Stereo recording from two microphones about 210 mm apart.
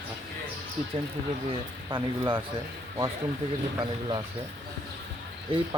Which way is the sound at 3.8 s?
25° right (ahead or behind).